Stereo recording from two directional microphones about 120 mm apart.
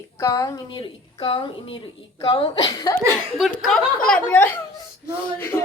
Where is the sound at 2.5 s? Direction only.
35° left (ahead or behind).